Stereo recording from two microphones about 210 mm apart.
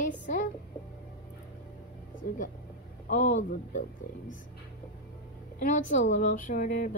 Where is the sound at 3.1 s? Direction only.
35° left (ahead or behind).